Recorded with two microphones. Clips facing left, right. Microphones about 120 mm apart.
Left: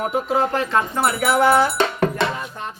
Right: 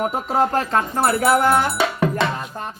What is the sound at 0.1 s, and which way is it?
Speech, 40° right (ahead or behind).